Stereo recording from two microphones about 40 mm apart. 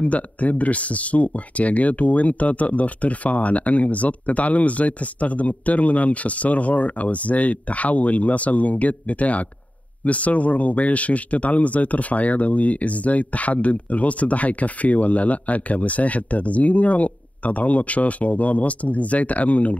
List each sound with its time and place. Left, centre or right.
0.0 s speech: left